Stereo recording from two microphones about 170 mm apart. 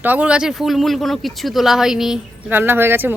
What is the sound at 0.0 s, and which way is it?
Speech, 10° right (ahead or behind).